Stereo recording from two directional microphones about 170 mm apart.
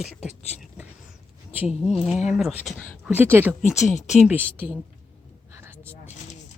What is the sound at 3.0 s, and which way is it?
Speech, 10° right (ahead or behind).